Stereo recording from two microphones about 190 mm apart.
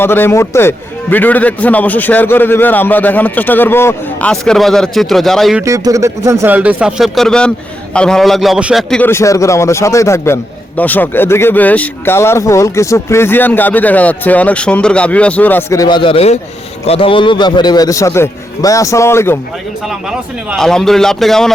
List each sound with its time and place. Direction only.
0.0 s a man's voice: 10° left (ahead or behind)
5.6 s a man's voice: 15° right (ahead or behind); by 19.4 s 15° left (ahead or behind)
19.9 s a man's voice: centre (ahead or behind)